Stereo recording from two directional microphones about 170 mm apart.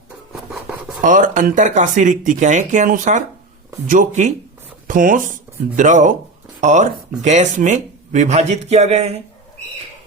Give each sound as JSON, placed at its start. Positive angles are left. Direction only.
{"t": 1.0, "sound": "speech", "side_deg": -50}